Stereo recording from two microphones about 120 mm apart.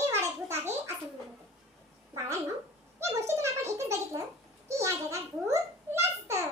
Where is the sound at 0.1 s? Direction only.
20° right (ahead or behind).